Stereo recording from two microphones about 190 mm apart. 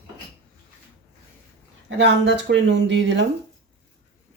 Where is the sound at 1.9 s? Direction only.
65° right (ahead or behind).